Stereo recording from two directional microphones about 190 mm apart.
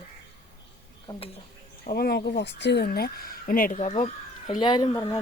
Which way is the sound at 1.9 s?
55° left (ahead or behind).